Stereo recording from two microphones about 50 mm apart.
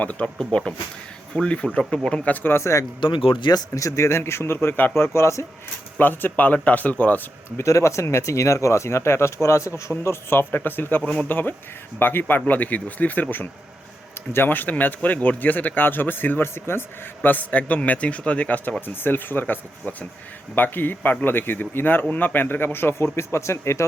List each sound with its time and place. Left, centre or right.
0.0 s speech: left
0.3 s speech: centre
2.2 s speech: left
2.6 s speech: left
5.1 s speech: left
6.0 s speech: left
7.6 s speech: left
9.9 s a man's voice: left
10.5 s a man's voice: left
14.3 s speech: left
17.2 s speech: left
18.9 s a man's voice: left